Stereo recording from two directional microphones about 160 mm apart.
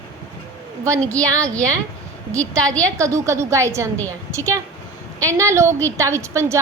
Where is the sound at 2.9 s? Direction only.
20° right (ahead or behind).